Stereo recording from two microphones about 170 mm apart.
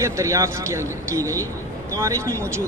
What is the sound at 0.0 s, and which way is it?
Speech, 15° right (ahead or behind).